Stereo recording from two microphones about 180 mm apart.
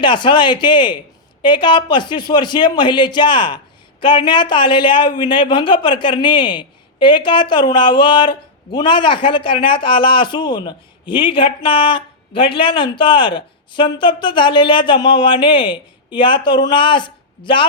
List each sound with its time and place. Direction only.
0.0 s speech: 25° left (ahead or behind)